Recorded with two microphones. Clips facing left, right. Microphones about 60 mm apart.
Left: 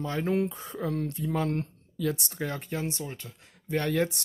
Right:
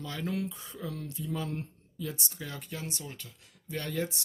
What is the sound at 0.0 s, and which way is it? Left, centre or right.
Speech, left.